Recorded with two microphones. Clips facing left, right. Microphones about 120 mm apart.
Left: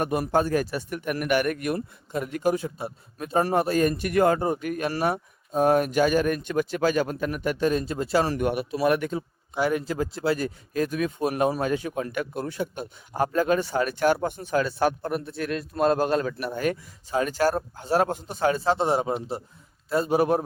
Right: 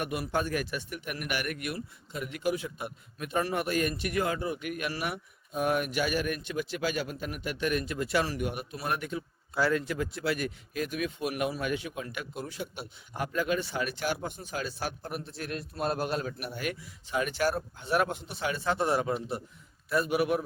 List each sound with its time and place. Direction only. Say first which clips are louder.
0.0 s a man's voice: left 8 dB; 40° left (ahead or behind)
7.6 s speech: left 4 dB; 30° left (ahead or behind)
8.3 s speech: left 8 dB; 55° left (ahead or behind); by 9.0 s 85° left
9.6 s a man's voice: left 3 dB; 20° left (ahead or behind)
9.8 s a man's voice: left 5 dB; 30° left (ahead or behind); by 15.6 s 70° left (ahead or behind)
15.8 s a man's voice: left 9 dB; 90° left
16.5 s speech: left 8 dB; 40° left (ahead or behind)